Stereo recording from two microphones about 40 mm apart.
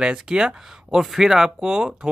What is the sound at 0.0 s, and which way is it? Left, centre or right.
Speech, right.